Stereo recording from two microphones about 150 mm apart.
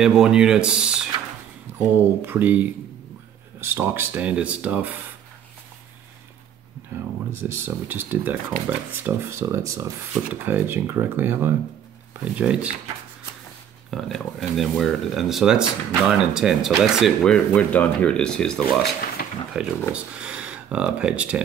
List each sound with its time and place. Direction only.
0.0 s speech: 5° right (ahead or behind)
1.7 s a sound: 15° right (ahead or behind)
2.2 s speech: 10° right (ahead or behind)
7.3 s speech: 15° right (ahead or behind)
13.8 s speech: centre (ahead or behind)
18.8 s speech: 80° left
19.6 s speech: 5° right (ahead or behind)